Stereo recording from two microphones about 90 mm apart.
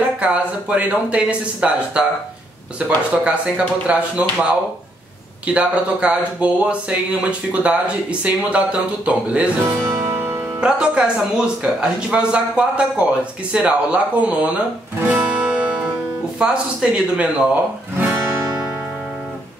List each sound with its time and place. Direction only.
0.2 s speech: 15° right (ahead or behind)
9.6 s music: 20° right (ahead or behind)
10.6 s speech: 10° right (ahead or behind)
15.0 s music: 15° right (ahead or behind)
16.3 s speech: 10° right (ahead or behind)
17.9 s music: 15° right (ahead or behind)